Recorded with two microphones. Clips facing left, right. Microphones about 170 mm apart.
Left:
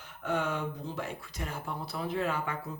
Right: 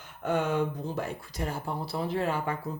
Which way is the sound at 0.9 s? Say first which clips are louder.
Right 4 dB; 35° right (ahead or behind).